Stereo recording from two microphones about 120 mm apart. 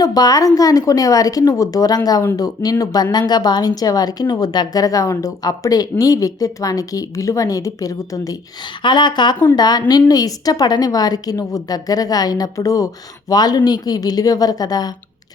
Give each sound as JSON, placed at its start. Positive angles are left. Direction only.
{"t": 0.0, "sound": "a woman's voice", "side_deg": 35}
{"t": 8.8, "sound": "speech", "side_deg": 40}